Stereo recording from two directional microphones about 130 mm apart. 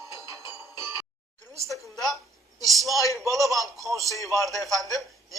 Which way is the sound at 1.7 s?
Centre (ahead or behind).